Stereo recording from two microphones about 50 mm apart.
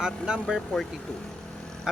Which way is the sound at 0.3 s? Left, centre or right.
Centre.